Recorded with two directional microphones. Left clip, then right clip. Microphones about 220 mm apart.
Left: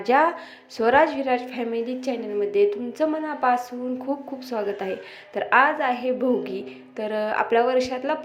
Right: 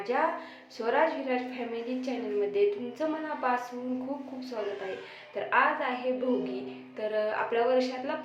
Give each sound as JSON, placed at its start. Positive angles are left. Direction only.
{"t": 0.0, "sound": "a woman's voice", "side_deg": 35}